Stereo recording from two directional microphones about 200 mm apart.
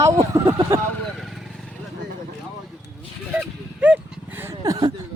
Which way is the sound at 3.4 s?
5° right (ahead or behind).